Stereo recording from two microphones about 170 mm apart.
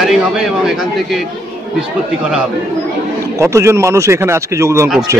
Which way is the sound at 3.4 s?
15° right (ahead or behind).